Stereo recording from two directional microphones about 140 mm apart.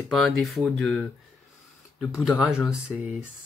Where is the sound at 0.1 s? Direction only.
Centre (ahead or behind).